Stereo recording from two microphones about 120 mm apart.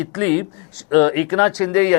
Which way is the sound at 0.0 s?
20° left (ahead or behind).